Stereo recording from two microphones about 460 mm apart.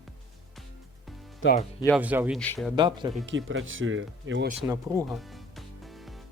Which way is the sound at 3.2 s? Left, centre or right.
Right.